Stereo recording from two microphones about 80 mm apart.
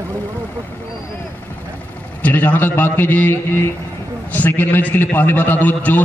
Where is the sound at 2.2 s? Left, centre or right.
Left.